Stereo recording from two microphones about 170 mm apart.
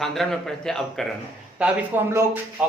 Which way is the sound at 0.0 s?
Centre (ahead or behind).